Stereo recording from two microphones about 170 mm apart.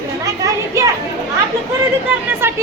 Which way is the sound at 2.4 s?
15° right (ahead or behind).